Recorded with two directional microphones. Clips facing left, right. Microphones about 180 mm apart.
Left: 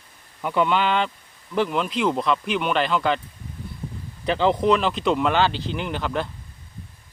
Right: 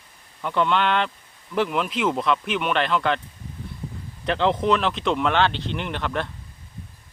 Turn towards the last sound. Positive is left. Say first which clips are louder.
# left 1 dB
turn(degrees=0)  # may be behind; listen again after turning